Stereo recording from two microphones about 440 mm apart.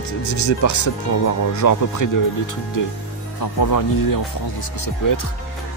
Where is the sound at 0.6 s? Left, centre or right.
Left.